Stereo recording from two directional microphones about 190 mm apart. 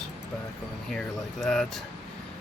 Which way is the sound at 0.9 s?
5° left (ahead or behind).